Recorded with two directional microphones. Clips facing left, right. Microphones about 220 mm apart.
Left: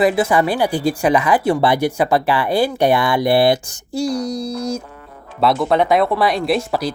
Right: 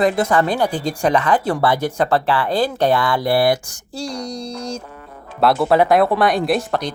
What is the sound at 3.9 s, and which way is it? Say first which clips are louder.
Speech: left 6 dB; 5° left (ahead or behind).